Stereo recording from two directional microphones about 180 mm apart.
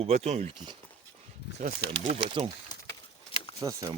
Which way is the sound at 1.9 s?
35° right (ahead or behind).